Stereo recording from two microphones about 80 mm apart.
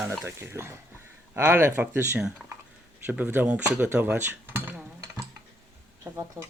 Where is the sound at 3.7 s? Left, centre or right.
Right.